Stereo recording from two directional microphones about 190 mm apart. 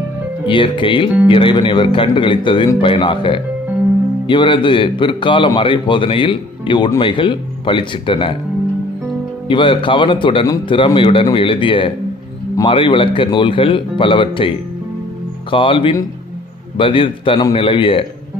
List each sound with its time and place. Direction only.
0.5 s a man's voice: 25° left (ahead or behind)
9.5 s a man's voice: 25° left (ahead or behind)
15.5 s a man's voice: 25° left (ahead or behind)